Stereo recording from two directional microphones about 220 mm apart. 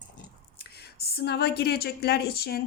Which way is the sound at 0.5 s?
45° left (ahead or behind).